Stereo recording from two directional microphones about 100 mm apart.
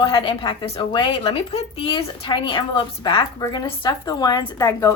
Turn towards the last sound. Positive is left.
turn(degrees=35)  # may be behind; listen again after turning